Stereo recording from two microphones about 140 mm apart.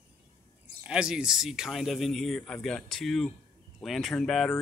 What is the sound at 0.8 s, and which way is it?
Speech, 5° right (ahead or behind).